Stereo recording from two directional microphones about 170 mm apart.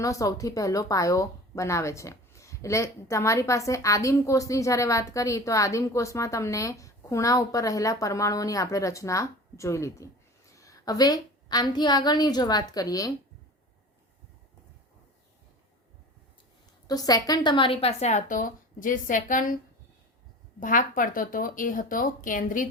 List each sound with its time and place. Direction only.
0.0 s speech: 20° left (ahead or behind)
16.8 s a woman's voice: 20° left (ahead or behind); by 19.5 s 50° left (ahead or behind)
20.6 s a woman's voice: 50° left (ahead or behind)